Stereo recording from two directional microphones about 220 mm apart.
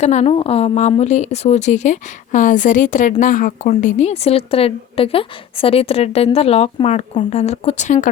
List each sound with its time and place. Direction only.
0.0 s a woman's voice: 30° left (ahead or behind)